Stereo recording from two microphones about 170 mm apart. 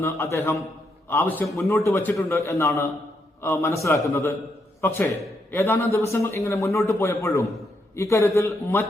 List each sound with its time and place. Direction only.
0.0 s a man's voice: 15° left (ahead or behind)